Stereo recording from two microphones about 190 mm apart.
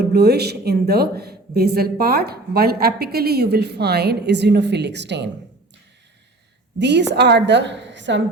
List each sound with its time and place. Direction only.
0.0 s speech: 60° right (ahead or behind)
6.7 s a woman's voice: 65° right (ahead or behind)